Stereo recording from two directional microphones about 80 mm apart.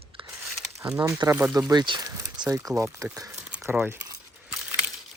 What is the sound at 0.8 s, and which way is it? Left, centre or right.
Speech, right.